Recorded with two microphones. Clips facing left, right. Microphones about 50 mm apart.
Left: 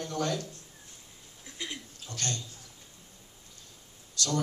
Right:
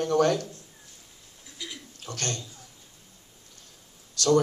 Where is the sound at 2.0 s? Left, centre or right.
Right.